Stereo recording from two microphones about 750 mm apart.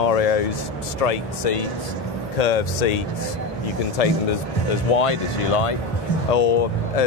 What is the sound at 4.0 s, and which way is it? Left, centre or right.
Speech, left.